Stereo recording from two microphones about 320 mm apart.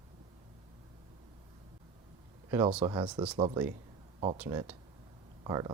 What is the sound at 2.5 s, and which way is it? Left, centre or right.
Speech, centre.